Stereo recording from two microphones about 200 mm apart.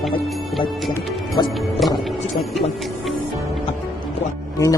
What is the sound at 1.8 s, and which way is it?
Speech, centre (ahead or behind).